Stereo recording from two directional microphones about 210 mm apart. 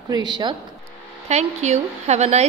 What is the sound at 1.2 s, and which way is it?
A woman's voice, 35° right (ahead or behind).